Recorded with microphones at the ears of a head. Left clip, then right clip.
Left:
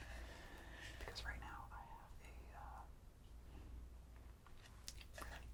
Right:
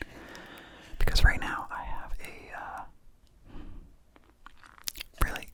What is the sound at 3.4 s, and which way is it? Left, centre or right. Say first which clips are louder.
Chewing: right 15 dB; right.